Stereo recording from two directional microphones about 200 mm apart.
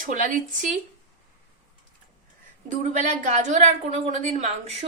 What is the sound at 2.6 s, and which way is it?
A woman's voice, 40° right (ahead or behind).